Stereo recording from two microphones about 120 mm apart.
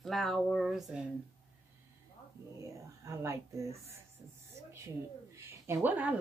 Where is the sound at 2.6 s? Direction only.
25° right (ahead or behind).